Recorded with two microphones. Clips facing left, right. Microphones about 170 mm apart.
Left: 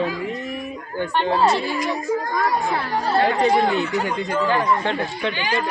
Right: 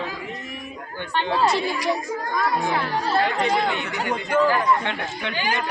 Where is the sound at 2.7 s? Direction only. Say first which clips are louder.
Left 1 dB; 35° left (ahead or behind).